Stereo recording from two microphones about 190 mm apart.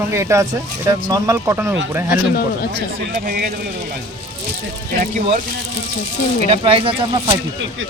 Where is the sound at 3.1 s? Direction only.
50° right (ahead or behind).